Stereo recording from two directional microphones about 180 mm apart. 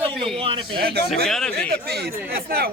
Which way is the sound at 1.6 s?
60° right (ahead or behind).